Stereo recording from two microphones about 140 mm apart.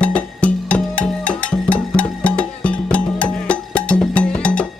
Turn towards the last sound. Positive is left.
turn(degrees=10)  # may be behind; listen again after turning